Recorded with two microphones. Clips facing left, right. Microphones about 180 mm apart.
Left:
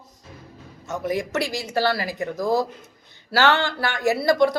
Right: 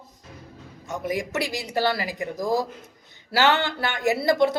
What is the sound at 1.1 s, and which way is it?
A man's voice, 15° right (ahead or behind).